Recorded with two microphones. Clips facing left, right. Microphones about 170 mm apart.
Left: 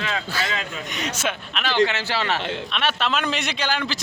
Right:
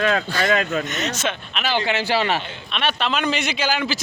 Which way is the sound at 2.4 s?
80° left.